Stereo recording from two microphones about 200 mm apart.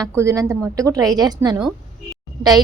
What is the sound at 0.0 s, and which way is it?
A woman's voice, 15° right (ahead or behind).